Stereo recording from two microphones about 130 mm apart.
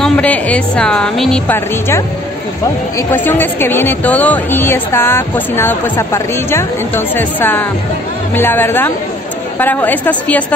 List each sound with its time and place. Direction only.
0.0 s a woman's voice: 10° left (ahead or behind)
1.5 s a woman's voice: 20° left (ahead or behind)